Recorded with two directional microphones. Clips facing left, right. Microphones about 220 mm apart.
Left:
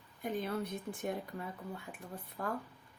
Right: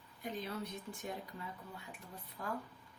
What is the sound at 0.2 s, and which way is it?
Speech, 50° left (ahead or behind).